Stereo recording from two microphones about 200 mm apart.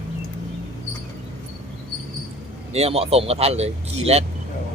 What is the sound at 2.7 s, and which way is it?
Speech, 30° right (ahead or behind).